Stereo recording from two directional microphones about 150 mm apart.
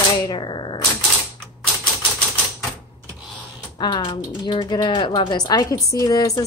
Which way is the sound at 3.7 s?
30° left (ahead or behind).